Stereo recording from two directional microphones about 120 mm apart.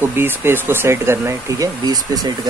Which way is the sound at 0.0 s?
20° right (ahead or behind).